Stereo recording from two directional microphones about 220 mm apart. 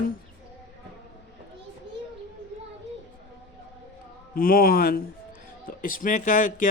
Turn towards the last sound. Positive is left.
turn(degrees=35)  # may be behind; listen again after turning